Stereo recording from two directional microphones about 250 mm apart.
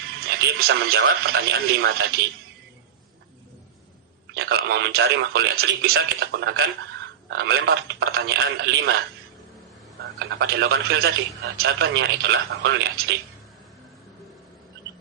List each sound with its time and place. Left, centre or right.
0.2 s speech: right
4.4 s speech: right
10.0 s speech: right